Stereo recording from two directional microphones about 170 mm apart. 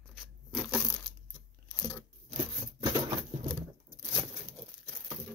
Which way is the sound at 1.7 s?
15° left (ahead or behind).